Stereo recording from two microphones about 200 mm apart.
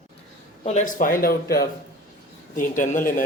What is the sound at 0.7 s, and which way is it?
Speech, 40° left (ahead or behind).